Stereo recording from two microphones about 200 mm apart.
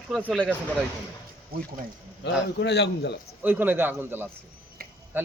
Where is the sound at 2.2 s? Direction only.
60° left (ahead or behind).